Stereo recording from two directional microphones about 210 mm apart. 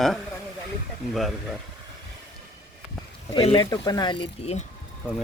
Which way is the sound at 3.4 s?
25° left (ahead or behind).